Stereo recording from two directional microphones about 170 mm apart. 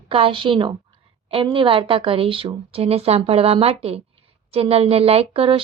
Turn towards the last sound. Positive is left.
turn(degrees=-30)  # may be behind; listen again after turning